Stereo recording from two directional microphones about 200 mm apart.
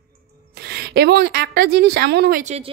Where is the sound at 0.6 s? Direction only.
55° right (ahead or behind).